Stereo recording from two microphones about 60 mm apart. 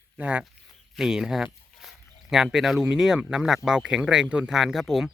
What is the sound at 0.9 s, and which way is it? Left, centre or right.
Speech, centre.